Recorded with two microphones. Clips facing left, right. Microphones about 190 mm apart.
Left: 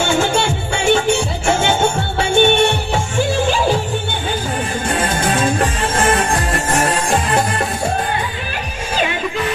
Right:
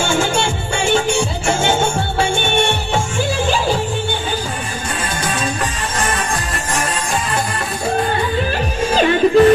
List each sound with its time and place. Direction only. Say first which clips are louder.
5.2 s music: left 4 dB; 55° left (ahead or behind)
8.9 s music: right 9 dB; 45° right (ahead or behind)